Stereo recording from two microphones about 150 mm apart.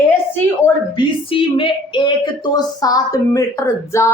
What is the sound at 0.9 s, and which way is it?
Speech, 35° left (ahead or behind).